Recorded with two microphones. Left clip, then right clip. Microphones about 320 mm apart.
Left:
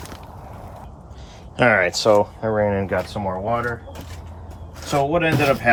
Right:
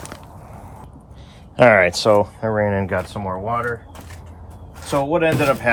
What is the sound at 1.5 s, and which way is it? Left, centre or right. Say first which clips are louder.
Speech: right 4 dB; centre.